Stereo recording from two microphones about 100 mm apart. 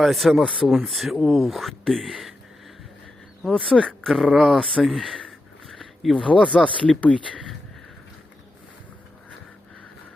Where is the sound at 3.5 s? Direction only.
Centre (ahead or behind).